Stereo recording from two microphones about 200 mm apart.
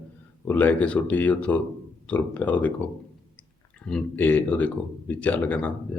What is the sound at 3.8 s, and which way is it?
Speech, 5° left (ahead or behind).